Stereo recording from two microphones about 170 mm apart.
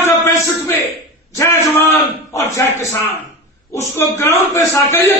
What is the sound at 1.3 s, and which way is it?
Speech, 20° left (ahead or behind).